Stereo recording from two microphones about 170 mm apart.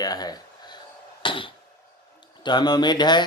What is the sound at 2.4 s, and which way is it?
Speech, 25° left (ahead or behind).